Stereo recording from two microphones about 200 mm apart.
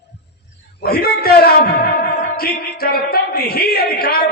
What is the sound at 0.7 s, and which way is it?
Speech, 50° left (ahead or behind).